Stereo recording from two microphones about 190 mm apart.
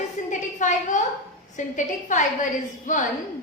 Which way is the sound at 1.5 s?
40° left (ahead or behind).